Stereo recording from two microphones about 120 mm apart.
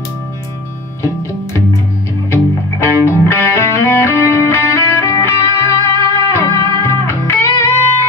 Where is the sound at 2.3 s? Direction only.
20° left (ahead or behind).